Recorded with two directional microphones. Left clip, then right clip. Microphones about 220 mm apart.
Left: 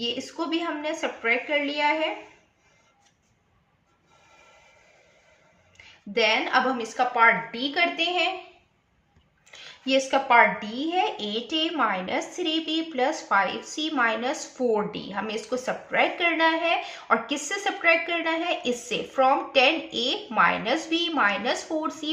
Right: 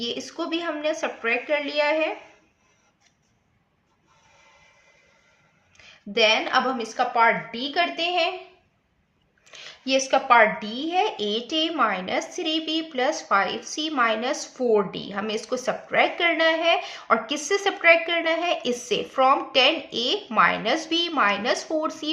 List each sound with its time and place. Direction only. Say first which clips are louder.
0.0 s a woman's voice: even; 40° right (ahead or behind)
5.7 s a woman's voice: right 2 dB; 40° right (ahead or behind)
9.5 s a sound: right 1 dB; 40° right (ahead or behind)
10.9 s a woman's voice: right 3 dB; 40° right (ahead or behind)